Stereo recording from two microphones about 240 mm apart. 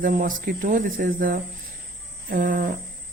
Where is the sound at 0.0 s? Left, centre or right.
Right.